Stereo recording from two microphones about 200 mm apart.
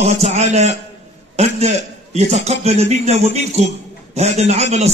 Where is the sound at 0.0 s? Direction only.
35° right (ahead or behind).